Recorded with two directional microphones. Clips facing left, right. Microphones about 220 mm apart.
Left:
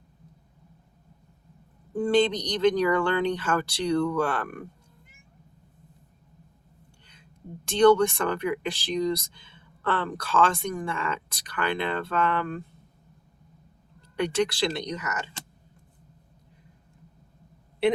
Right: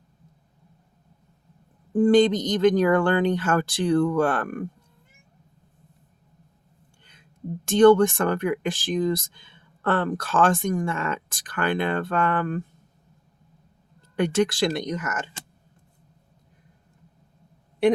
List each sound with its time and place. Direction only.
1.9 s speech: 45° right (ahead or behind)
7.1 s speech: 50° right (ahead or behind)
14.2 s speech: 50° right (ahead or behind)